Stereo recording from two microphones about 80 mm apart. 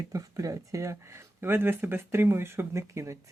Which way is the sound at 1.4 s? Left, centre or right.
Right.